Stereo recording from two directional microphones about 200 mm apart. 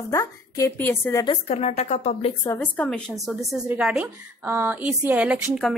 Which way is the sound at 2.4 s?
10° left (ahead or behind).